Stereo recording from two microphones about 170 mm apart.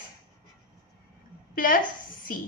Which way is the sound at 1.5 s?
55° left (ahead or behind).